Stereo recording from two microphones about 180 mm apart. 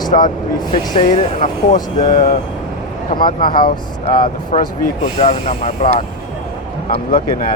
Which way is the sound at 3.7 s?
55° left (ahead or behind).